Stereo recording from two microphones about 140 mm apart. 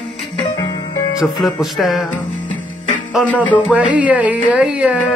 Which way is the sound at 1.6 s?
Centre (ahead or behind).